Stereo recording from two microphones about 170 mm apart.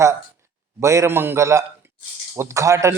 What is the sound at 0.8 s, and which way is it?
Speech, 15° right (ahead or behind).